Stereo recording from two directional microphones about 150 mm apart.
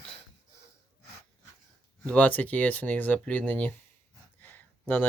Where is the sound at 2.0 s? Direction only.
10° left (ahead or behind).